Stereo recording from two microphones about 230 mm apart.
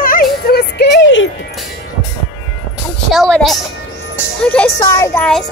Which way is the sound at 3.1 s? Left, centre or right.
Centre.